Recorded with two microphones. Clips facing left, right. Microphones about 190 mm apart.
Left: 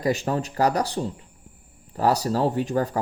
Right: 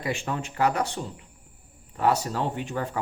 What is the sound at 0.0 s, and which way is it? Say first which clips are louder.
Speech: left 6 dB; 40° left (ahead or behind).